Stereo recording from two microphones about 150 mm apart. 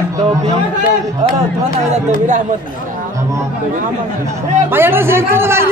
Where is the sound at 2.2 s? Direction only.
55° right (ahead or behind).